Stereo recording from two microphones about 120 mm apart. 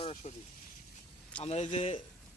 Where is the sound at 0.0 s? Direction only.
60° left (ahead or behind).